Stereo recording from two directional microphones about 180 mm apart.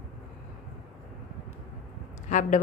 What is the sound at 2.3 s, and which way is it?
Speech, 45° left (ahead or behind).